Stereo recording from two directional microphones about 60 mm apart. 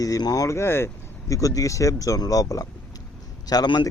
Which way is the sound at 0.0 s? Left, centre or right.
Left.